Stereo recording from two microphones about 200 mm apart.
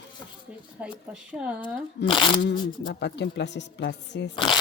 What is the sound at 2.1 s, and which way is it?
Speech, 25° left (ahead or behind).